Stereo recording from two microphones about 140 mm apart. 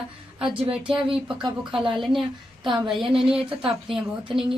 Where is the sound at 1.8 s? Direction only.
Centre (ahead or behind).